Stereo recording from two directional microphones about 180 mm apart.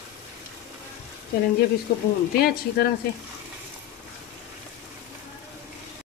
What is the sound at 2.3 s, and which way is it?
Speech, 60° left (ahead or behind).